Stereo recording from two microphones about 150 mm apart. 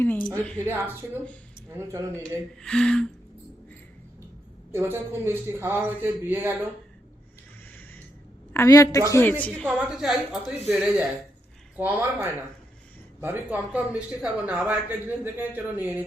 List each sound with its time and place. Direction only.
0.0 s a woman's voice: 10° left (ahead or behind)
0.6 s speech: 15° right (ahead or behind)
2.6 s a woman's voice: 5° left (ahead or behind)
4.7 s speech: 15° right (ahead or behind)
8.5 s a woman's voice: 20° left (ahead or behind)
9.6 s a woman's voice: 5° right (ahead or behind)